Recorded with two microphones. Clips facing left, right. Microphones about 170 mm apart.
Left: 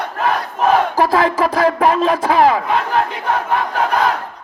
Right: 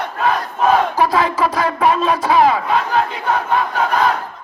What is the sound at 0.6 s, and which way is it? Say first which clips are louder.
Crowd: left 1 dB; 40° left (ahead or behind).